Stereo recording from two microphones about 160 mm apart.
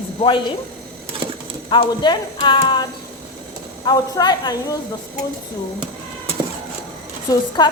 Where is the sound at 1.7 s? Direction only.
30° left (ahead or behind).